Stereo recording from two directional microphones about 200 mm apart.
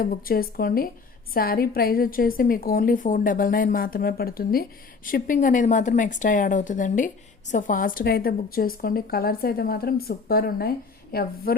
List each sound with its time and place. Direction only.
0.0 s a woman's voice: 45° left (ahead or behind)